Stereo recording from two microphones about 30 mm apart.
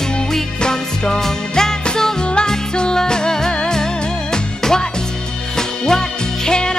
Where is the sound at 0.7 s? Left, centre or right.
Left.